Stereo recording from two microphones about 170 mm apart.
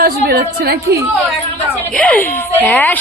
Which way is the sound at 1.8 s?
10° left (ahead or behind).